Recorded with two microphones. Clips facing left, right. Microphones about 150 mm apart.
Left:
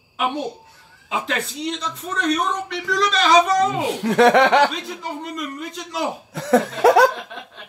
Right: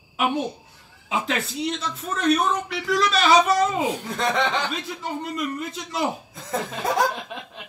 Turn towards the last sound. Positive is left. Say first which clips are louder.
# left 9 dB
turn(degrees=80)